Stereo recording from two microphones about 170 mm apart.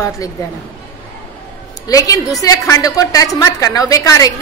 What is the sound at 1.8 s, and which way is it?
A woman's voice, 20° left (ahead or behind).